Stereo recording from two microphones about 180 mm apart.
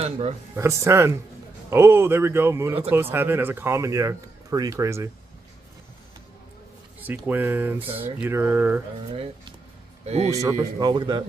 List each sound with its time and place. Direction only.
0.0 s speech: 35° right (ahead or behind)
0.6 s speech: 15° right (ahead or behind)
7.0 s speech: 10° right (ahead or behind)
7.8 s speech: 30° right (ahead or behind)
8.2 s speech: 15° right (ahead or behind)
9.1 s speech: 30° right (ahead or behind)
10.3 s speech: 15° right (ahead or behind)